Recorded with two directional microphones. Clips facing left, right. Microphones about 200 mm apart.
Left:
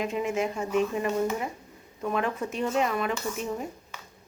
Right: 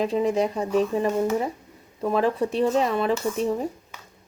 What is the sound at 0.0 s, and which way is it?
A woman's voice, 35° right (ahead or behind).